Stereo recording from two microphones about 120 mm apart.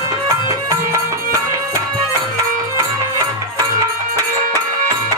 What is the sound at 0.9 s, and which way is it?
Music, 25° right (ahead or behind).